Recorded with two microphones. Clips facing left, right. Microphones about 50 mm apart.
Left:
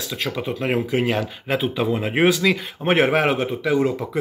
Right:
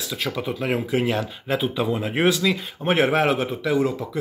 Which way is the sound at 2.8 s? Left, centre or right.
Centre.